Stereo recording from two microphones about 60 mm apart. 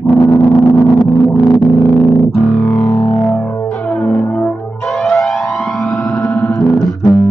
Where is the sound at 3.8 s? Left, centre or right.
Centre.